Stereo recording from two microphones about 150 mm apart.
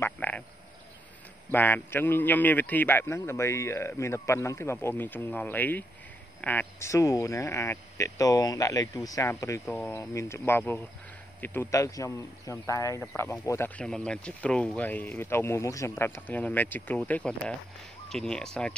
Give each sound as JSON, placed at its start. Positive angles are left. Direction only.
{"t": 0.0, "sound": "frog", "side_deg": 10}
{"t": 1.5, "sound": "a man's voice", "side_deg": 15}
{"t": 13.8, "sound": "a man's voice", "side_deg": 5}